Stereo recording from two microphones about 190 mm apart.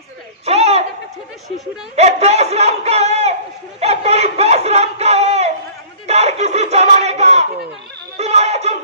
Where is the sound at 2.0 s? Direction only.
35° right (ahead or behind).